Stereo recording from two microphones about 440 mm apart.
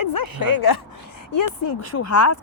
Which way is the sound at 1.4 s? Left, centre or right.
Left.